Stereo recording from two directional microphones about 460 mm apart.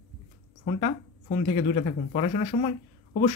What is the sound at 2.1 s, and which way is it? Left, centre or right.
Speech, centre.